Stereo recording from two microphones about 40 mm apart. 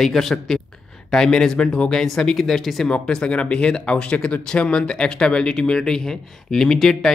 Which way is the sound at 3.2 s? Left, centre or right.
Left.